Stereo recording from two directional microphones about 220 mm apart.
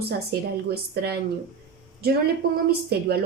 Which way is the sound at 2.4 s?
45° right (ahead or behind).